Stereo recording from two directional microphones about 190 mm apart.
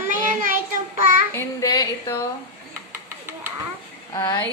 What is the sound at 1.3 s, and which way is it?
Speech, 15° left (ahead or behind).